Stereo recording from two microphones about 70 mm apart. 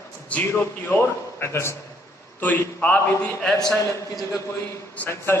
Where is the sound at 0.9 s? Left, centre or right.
Left.